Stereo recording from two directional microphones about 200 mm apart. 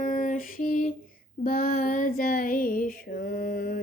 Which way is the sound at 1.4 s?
45° left (ahead or behind).